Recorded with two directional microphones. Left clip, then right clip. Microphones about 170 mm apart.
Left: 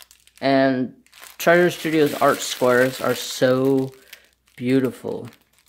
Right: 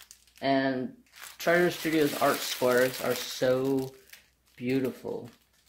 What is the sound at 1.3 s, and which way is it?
Speech, 45° left (ahead or behind).